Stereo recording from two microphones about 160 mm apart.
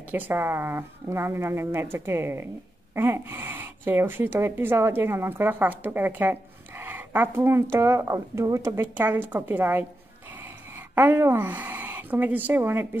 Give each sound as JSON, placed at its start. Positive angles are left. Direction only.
{"t": 0.1, "sound": "a woman's voice", "side_deg": -15}
{"t": 11.0, "sound": "speech", "side_deg": -15}